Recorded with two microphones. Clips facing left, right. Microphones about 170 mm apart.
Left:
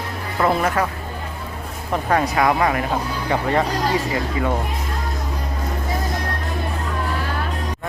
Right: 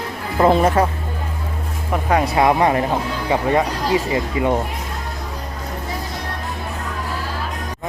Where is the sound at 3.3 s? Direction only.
15° right (ahead or behind).